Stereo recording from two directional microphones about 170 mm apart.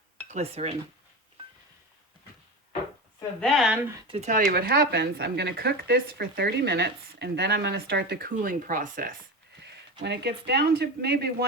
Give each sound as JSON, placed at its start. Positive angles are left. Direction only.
{"t": 0.3, "sound": "speech", "side_deg": -40}
{"t": 3.4, "sound": "speech", "side_deg": 0}
{"t": 4.1, "sound": "speech", "side_deg": -45}
{"t": 9.6, "sound": "a sound", "side_deg": -85}
{"t": 10.0, "sound": "speech", "side_deg": -85}